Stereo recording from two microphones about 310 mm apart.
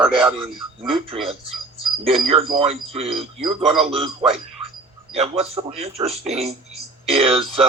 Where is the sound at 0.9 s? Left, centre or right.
Centre.